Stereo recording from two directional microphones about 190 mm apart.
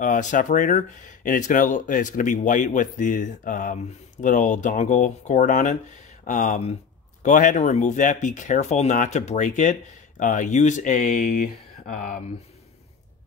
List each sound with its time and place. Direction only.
0.0 s speech: 45° left (ahead or behind)